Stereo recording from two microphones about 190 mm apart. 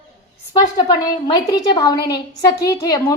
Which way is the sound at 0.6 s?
20° left (ahead or behind).